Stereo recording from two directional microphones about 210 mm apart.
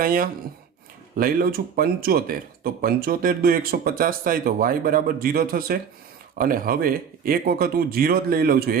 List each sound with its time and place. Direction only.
0.0 s speech: 40° right (ahead or behind)